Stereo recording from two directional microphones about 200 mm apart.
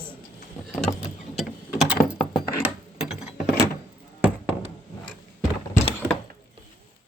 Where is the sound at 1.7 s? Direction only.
45° left (ahead or behind).